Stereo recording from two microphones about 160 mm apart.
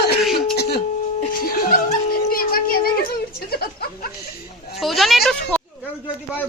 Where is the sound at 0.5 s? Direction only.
90° left.